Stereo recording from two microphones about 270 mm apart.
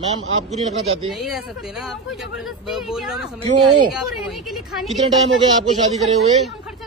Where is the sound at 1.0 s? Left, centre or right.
Centre.